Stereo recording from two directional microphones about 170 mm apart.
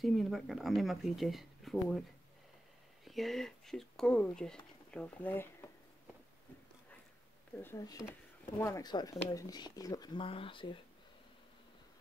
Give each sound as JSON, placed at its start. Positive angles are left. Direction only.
{"t": 0.0, "sound": "speech", "side_deg": 0}
{"t": 3.1, "sound": "speech", "side_deg": 0}
{"t": 7.6, "sound": "speech", "side_deg": 20}